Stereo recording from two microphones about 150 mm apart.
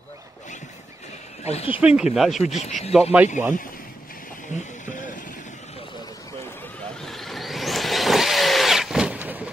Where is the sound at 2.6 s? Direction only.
45° left (ahead or behind).